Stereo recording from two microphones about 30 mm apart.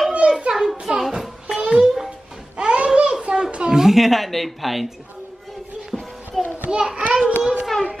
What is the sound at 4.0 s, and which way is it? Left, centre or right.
Speech, centre.